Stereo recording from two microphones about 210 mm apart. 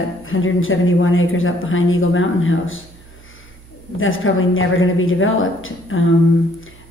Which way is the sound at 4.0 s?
70° left (ahead or behind).